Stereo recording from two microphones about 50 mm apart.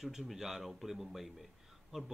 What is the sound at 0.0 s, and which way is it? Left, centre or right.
A man's voice, centre.